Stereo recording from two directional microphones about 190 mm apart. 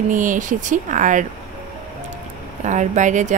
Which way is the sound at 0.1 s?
45° right (ahead or behind).